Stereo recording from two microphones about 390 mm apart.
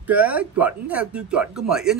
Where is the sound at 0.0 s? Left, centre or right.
Centre.